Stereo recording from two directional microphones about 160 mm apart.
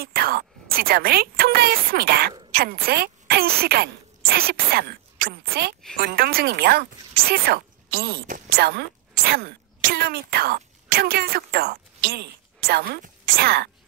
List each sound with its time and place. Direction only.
0.0 s speech: 70° right (ahead or behind)
5.9 s speech: 70° right (ahead or behind)